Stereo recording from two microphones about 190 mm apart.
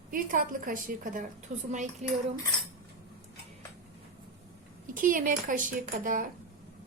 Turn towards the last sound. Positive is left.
turn(degrees=-45)  # may be behind; listen again after turning